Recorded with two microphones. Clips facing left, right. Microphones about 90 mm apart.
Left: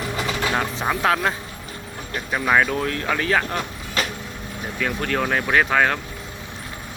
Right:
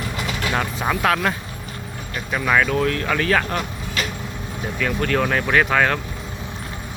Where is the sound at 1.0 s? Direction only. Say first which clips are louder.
Even; 20° left (ahead or behind).